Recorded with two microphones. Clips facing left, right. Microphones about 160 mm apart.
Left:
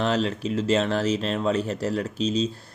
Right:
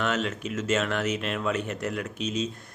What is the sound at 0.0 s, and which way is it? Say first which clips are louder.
Speech: left 4 dB; 30° left (ahead or behind).